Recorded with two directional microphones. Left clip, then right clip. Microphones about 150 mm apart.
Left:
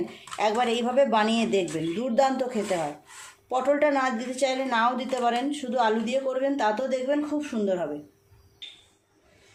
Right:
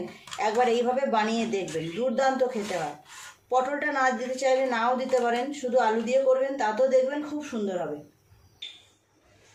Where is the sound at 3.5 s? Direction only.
50° left (ahead or behind).